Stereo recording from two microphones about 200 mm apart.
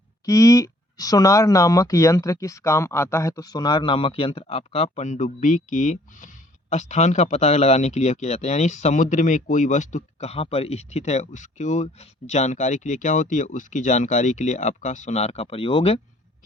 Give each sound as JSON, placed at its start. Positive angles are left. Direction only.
{"t": 0.3, "sound": "speech", "side_deg": 15}